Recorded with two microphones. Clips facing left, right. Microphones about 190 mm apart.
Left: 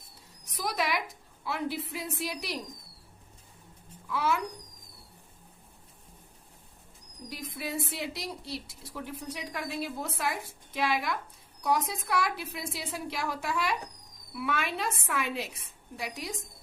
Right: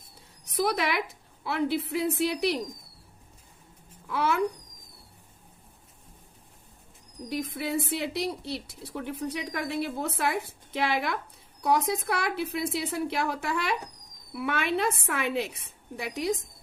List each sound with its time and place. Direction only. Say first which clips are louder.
0.7 s a woman's voice: right 3 dB; 60° right (ahead or behind)
4.1 s a woman's voice: right 2 dB; 60° right (ahead or behind)
7.3 s a woman's voice: right 7 dB; 65° right (ahead or behind)